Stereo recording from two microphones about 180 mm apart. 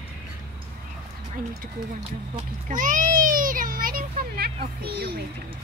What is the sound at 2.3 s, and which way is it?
A child's voice, 45° right (ahead or behind).